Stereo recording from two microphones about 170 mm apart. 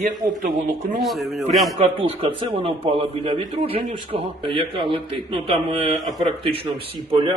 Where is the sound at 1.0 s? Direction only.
Centre (ahead or behind).